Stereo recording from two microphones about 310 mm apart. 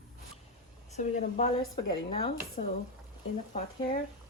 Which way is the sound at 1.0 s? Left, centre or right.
Left.